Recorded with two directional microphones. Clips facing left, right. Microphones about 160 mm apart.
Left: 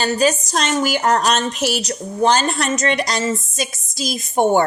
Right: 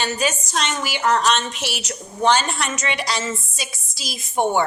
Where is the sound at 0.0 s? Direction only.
35° left (ahead or behind).